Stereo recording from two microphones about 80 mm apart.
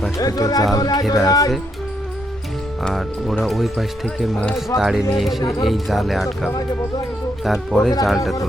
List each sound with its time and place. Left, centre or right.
0.2 s speech: left
3.5 s speech: centre
5.4 s speech: left
5.6 s speech: centre